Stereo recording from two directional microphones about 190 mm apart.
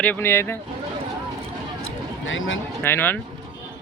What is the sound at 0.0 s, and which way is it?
Speech, 10° left (ahead or behind).